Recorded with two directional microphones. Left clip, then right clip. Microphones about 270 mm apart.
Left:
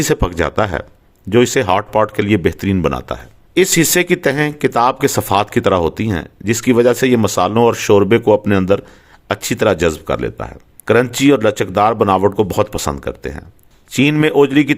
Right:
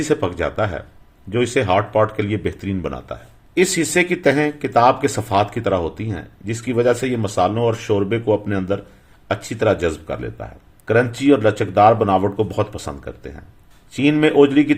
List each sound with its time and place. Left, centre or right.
0.0 s speech: left